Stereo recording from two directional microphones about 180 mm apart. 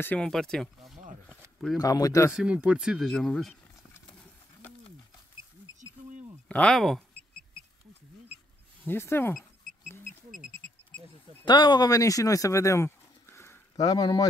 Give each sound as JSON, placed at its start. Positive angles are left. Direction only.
{"t": 0.0, "sound": "speech", "side_deg": 5}
{"t": 1.8, "sound": "speech", "side_deg": 20}
{"t": 2.3, "sound": "speech", "side_deg": -5}
{"t": 6.5, "sound": "speech", "side_deg": 5}
{"t": 8.8, "sound": "speech", "side_deg": 15}
{"t": 11.4, "sound": "speech", "side_deg": 25}